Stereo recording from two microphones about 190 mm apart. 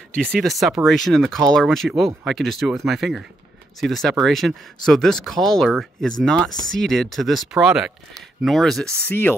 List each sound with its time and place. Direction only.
0.1 s speech: 5° left (ahead or behind)